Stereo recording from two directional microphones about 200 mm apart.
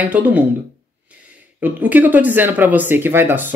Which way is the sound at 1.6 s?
10° right (ahead or behind).